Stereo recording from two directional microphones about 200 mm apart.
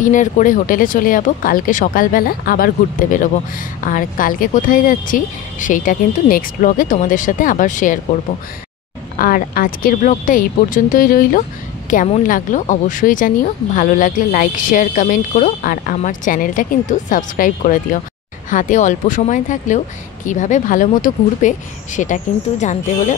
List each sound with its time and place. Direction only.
0.0 s speech: 40° left (ahead or behind)
9.2 s speech: 45° left (ahead or behind)